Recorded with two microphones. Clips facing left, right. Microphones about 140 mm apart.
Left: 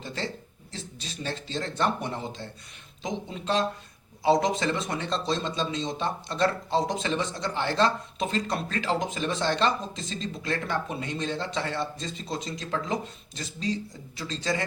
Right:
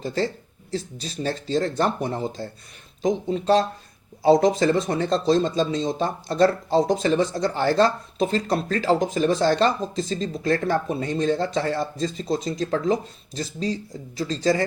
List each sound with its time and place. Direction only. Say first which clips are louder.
0.0 s speech: right 9 dB; 40° right (ahead or behind)